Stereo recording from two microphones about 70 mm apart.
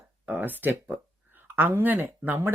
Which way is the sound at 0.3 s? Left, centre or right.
Right.